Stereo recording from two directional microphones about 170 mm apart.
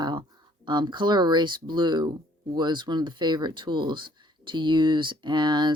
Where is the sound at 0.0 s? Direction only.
25° right (ahead or behind).